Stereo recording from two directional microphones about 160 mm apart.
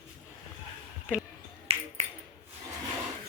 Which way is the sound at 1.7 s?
35° right (ahead or behind).